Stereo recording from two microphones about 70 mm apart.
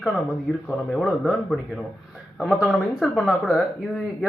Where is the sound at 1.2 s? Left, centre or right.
Centre.